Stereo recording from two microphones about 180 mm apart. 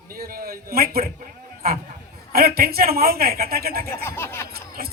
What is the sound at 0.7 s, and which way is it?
Speech, 55° right (ahead or behind).